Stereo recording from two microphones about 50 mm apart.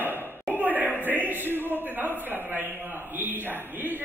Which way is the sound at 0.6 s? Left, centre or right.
Right.